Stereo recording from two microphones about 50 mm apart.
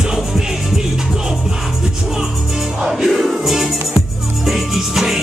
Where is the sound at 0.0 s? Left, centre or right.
Centre.